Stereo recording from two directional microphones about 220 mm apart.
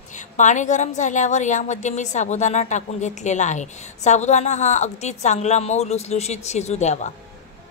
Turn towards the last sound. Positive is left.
turn(degrees=30)  # may be behind; listen again after turning